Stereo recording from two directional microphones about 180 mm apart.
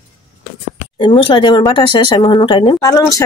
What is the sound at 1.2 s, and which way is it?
Speech, 25° left (ahead or behind).